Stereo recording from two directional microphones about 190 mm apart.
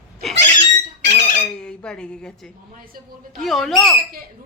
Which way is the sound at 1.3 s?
10° left (ahead or behind).